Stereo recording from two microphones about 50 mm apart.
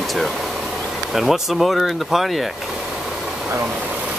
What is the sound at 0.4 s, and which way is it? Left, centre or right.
Bee, centre.